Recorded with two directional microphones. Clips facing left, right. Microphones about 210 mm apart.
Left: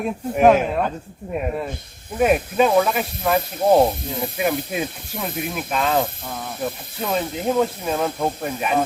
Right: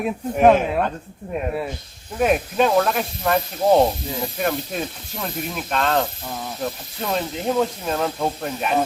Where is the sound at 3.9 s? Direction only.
55° left (ahead or behind).